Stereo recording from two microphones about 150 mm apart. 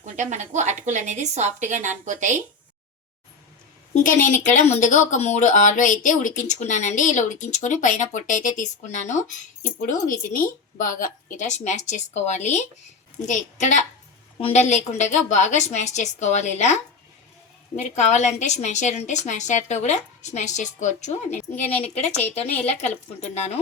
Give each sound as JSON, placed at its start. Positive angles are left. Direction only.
{"t": 0.0, "sound": "speech", "side_deg": -55}
{"t": 3.9, "sound": "a woman's voice", "side_deg": 55}
{"t": 21.5, "sound": "speech", "side_deg": 10}
{"t": 21.9, "sound": "a woman's voice", "side_deg": 45}